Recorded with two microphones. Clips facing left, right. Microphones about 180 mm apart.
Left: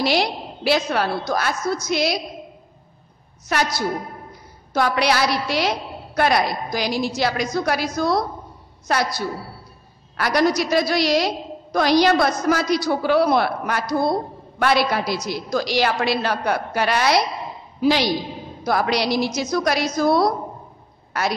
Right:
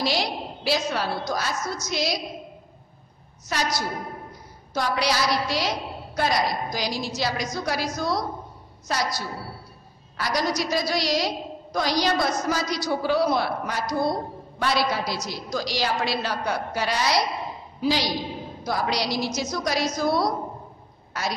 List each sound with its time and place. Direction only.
0.0 s a woman's voice: 60° left (ahead or behind)
3.4 s a woman's voice: 60° left (ahead or behind)